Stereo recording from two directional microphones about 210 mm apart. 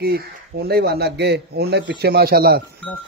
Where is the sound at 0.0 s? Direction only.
50° right (ahead or behind).